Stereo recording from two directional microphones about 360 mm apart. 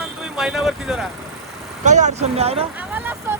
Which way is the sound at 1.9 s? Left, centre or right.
Centre.